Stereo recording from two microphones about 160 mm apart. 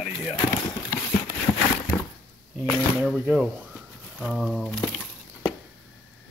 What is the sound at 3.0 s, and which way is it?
Speech, 10° right (ahead or behind).